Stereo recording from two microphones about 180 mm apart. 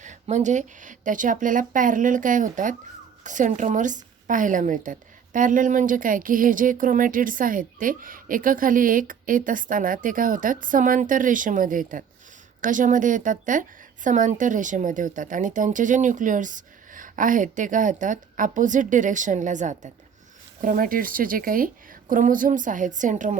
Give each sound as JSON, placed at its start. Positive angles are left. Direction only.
{"t": 0.0, "sound": "a woman's voice", "side_deg": -40}